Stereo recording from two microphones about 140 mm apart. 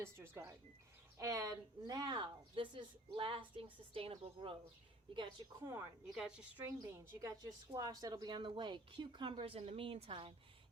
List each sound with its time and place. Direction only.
0.0 s a woman's voice: 20° right (ahead or behind); by 4.5 s 40° right (ahead or behind)
5.6 s speech: 20° right (ahead or behind)
6.1 s speech: 5° right (ahead or behind)
6.7 s a woman's voice: 20° right (ahead or behind); by 10.3 s 40° right (ahead or behind)